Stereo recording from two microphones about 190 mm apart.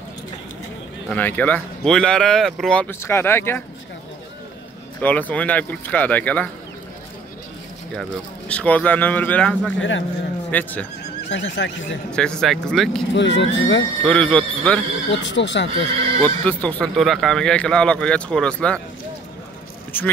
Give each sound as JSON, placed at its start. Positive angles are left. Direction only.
{"t": 1.0, "sound": "speech", "side_deg": 10}
{"t": 5.0, "sound": "speech", "side_deg": 10}
{"t": 7.9, "sound": "speech", "side_deg": 5}
{"t": 9.8, "sound": "speech", "side_deg": 80}
{"t": 10.5, "sound": "speech", "side_deg": 10}
{"t": 11.2, "sound": "speech", "side_deg": 75}
{"t": 12.1, "sound": "speech", "side_deg": 5}
{"t": 13.1, "sound": "speech", "side_deg": 70}
{"t": 14.0, "sound": "speech", "side_deg": 5}
{"t": 15.0, "sound": "speech", "side_deg": 70}
{"t": 15.7, "sound": "speech", "side_deg": -30}
{"t": 16.4, "sound": "speech", "side_deg": 5}
{"t": 19.9, "sound": "speech", "side_deg": 10}